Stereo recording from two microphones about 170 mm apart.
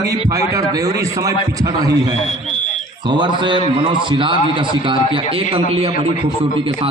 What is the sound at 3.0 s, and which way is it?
A man's voice, 25° right (ahead or behind).